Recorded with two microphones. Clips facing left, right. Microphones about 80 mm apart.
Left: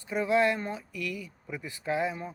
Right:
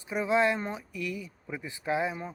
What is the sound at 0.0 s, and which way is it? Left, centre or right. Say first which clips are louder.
Speech: left 1 dB; centre.